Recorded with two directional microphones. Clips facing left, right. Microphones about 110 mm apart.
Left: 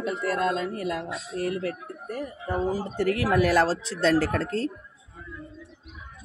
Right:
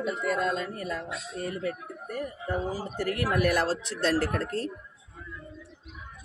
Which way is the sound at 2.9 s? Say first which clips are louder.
Left 5 dB; 90° left.